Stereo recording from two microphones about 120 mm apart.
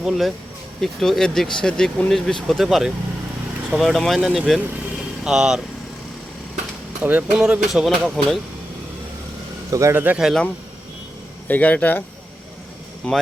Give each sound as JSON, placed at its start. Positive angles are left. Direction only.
{"t": 0.0, "sound": "speech", "side_deg": 0}
{"t": 7.0, "sound": "speech", "side_deg": -15}
{"t": 9.6, "sound": "a man's voice", "side_deg": -30}
{"t": 9.9, "sound": "speech", "side_deg": -15}
{"t": 11.4, "sound": "speech", "side_deg": 15}
{"t": 13.0, "sound": "speech", "side_deg": 10}